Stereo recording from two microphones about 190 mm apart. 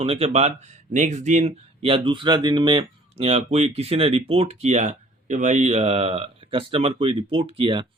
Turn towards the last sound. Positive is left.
turn(degrees=-30)  # may be behind; listen again after turning